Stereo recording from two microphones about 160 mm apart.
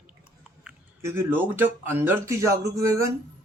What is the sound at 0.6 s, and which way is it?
Speech, 15° right (ahead or behind).